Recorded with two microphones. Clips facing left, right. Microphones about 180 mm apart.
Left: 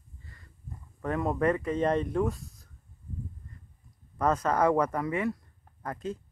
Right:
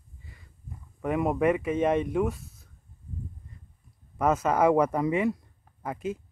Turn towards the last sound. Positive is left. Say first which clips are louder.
# right 3 dB
turn(degrees=-10)  # may be behind; listen again after turning